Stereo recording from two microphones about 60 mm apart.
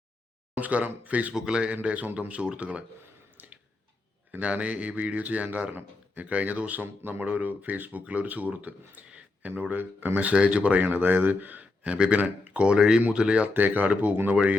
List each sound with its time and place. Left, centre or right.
0.5 s speech: right
1.3 s speech: centre
4.3 s speech: right
10.8 s speech: right
13.5 s speech: right